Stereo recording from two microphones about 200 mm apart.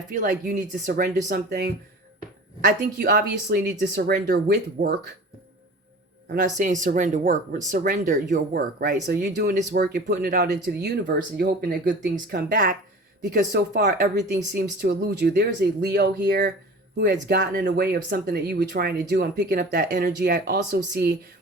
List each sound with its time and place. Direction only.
0.1 s speech: 40° right (ahead or behind)
6.3 s speech: 40° right (ahead or behind)
9.3 s speech: 55° right (ahead or behind)